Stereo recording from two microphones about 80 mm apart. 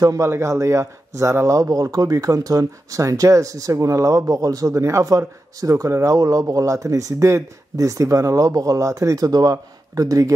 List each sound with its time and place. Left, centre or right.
0.0 s speech: right